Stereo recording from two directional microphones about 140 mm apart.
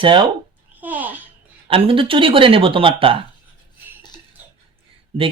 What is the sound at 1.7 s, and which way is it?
Speech, 40° right (ahead or behind).